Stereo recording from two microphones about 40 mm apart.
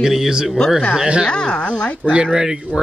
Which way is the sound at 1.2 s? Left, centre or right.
Left.